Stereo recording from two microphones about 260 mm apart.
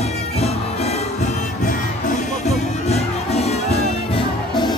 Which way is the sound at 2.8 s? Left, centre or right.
Left.